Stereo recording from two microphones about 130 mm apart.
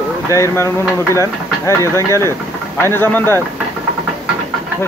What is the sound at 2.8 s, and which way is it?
Speech, 15° left (ahead or behind).